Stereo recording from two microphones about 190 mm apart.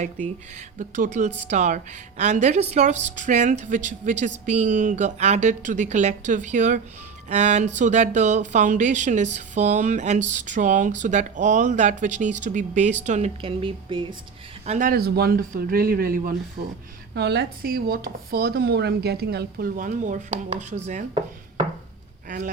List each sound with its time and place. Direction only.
0.0 s speech: 40° right (ahead or behind)
14.7 s speech: 45° right (ahead or behind)
17.2 s speech: 60° right (ahead or behind); by 21.0 s 40° right (ahead or behind)
22.3 s speech: 45° right (ahead or behind)